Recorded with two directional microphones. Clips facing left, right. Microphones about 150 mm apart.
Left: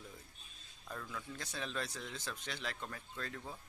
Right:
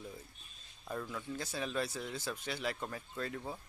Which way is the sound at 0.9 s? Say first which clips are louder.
Right 5 dB; 15° right (ahead or behind).